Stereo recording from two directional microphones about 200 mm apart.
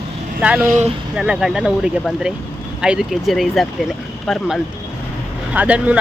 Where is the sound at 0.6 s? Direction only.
35° right (ahead or behind).